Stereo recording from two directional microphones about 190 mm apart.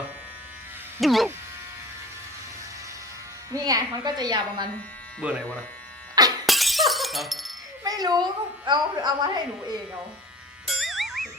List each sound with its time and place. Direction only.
1.0 s speech: centre (ahead or behind)
3.5 s speech: 20° right (ahead or behind)
5.2 s speech: 5° right (ahead or behind)
6.4 s glass: centre (ahead or behind)
7.9 s speech: 20° right (ahead or behind)
10.7 s music: centre (ahead or behind)